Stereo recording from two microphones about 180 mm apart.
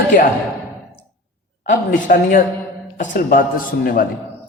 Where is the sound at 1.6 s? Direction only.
50° left (ahead or behind).